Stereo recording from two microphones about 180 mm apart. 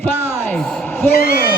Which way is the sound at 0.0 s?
10° left (ahead or behind).